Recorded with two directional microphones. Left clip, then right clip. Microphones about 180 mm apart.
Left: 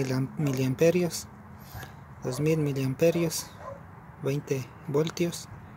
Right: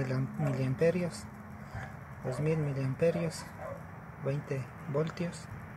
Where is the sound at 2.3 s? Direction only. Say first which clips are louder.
Left 6 dB; 70° left (ahead or behind).